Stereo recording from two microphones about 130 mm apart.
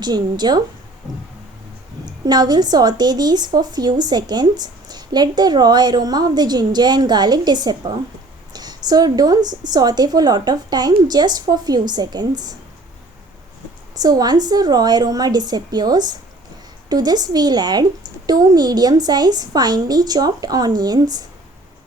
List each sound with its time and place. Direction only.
0.0 s a woman's voice: 30° right (ahead or behind)
2.0 s a woman's voice: 30° right (ahead or behind)
13.9 s a woman's voice: 30° right (ahead or behind)